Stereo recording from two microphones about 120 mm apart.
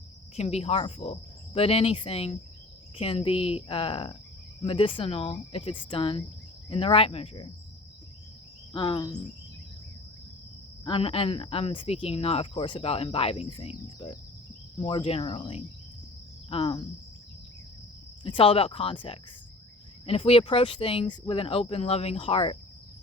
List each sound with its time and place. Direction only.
0.3 s speech: 60° left (ahead or behind)
8.7 s speech: 45° left (ahead or behind)
9.0 s speech: 30° left (ahead or behind)
10.8 s speech: 50° left (ahead or behind)
18.2 s speech: 50° left (ahead or behind)